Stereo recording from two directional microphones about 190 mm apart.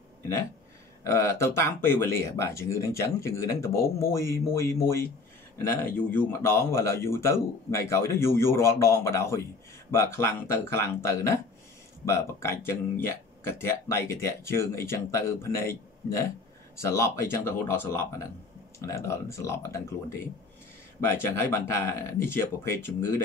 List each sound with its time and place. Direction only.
1.0 s speech: 15° left (ahead or behind)
21.1 s speech: 10° left (ahead or behind)